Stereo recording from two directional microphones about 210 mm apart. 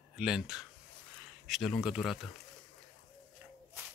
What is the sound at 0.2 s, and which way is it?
Speech, 5° right (ahead or behind).